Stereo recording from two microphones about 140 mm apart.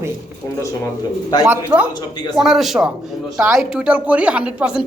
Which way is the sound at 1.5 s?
10° right (ahead or behind).